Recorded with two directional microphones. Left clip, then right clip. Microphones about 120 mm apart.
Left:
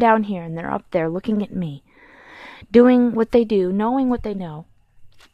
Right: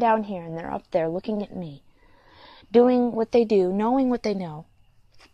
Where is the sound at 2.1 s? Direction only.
50° left (ahead or behind).